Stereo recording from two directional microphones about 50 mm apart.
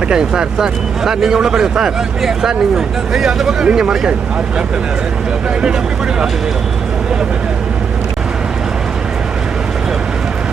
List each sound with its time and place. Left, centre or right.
0.1 s speech: centre
3.7 s speech: centre